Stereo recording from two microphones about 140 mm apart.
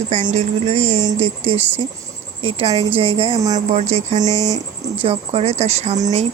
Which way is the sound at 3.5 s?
55° right (ahead or behind).